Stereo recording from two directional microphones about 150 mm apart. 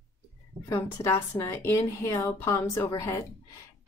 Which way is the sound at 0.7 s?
20° left (ahead or behind).